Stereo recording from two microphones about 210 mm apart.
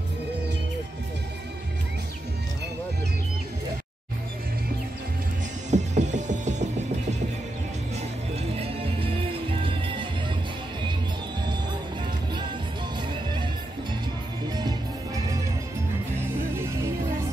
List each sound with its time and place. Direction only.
5.7 s music: 35° right (ahead or behind)
8.5 s music: 25° right (ahead or behind)
14.6 s music: 20° right (ahead or behind)
16.5 s music: 10° right (ahead or behind)